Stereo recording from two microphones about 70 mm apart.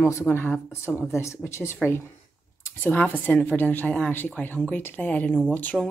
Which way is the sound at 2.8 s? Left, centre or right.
Left.